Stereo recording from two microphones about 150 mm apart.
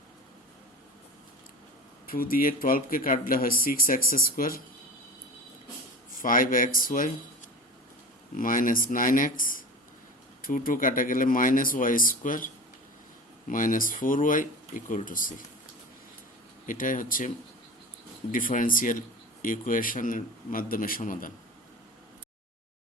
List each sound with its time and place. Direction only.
2.0 s speech: 75° left (ahead or behind)
6.2 s speech: 65° left (ahead or behind)
8.4 s speech: 65° left (ahead or behind)
13.5 s speech: 65° left (ahead or behind)
16.6 s speech: 60° left (ahead or behind)